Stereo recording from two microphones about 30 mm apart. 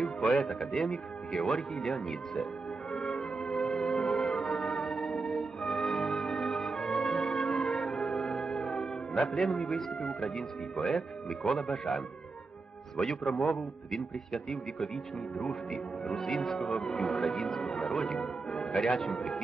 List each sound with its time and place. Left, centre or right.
0.0 s music: left
0.5 s speech: centre
2.9 s music: centre
7.0 s music: centre
9.6 s speech: centre
13.3 s a man's voice: left
13.9 s a man's voice: centre